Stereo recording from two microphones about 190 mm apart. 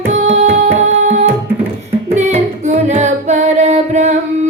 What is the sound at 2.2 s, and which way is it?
Music, 35° right (ahead or behind).